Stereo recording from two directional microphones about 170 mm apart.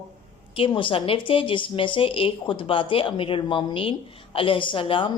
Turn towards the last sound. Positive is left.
turn(degrees=30)  # may be behind; listen again after turning